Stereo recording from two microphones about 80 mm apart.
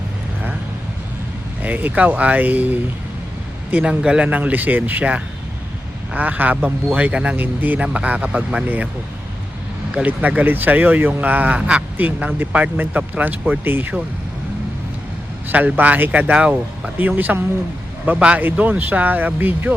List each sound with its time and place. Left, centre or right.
1.6 s speech: right
9.9 s speech: centre
15.4 s speech: right
16.3 s speech: centre